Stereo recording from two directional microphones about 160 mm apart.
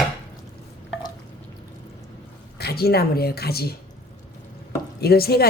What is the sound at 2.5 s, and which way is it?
Speech, 75° left (ahead or behind).